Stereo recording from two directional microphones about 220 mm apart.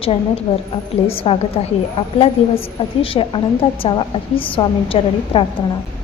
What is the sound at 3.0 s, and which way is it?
A woman's voice, 25° left (ahead or behind).